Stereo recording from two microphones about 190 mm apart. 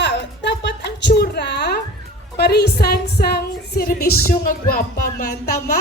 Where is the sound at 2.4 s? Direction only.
60° left (ahead or behind).